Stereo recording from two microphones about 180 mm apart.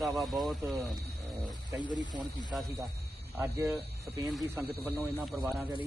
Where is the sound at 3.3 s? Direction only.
15° right (ahead or behind).